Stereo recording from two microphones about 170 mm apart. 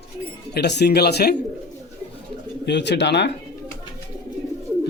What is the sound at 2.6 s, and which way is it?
Speech, 90° left.